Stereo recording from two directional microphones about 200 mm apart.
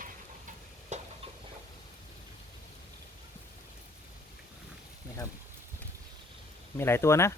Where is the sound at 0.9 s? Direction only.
35° right (ahead or behind).